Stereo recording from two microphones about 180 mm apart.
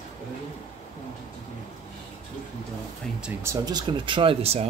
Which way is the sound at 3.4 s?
20° right (ahead or behind).